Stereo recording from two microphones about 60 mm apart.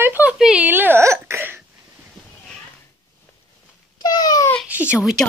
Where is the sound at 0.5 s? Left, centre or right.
Right.